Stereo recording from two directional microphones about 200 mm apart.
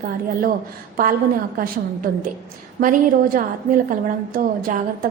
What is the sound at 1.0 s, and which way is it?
A woman's voice, 45° right (ahead or behind).